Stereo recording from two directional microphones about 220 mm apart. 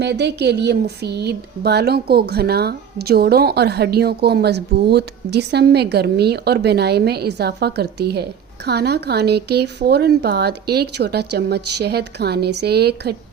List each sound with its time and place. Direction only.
0.0 s speech: 50° right (ahead or behind)